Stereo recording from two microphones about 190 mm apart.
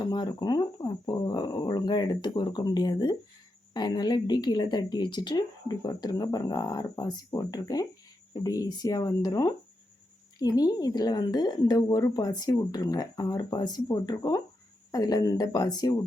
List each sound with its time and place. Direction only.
0.0 s speech: 20° left (ahead or behind)